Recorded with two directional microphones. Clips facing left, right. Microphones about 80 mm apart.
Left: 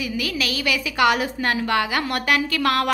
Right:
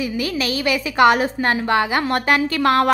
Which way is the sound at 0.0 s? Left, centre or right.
Right.